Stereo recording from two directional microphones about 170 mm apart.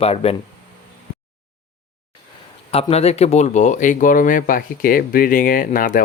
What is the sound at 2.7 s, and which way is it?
Speech, 35° left (ahead or behind).